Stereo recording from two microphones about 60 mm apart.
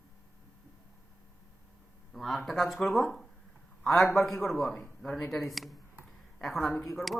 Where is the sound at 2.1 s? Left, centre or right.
Centre.